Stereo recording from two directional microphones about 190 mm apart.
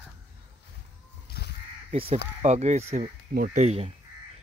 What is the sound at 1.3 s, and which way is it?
Crow, 55° left (ahead or behind).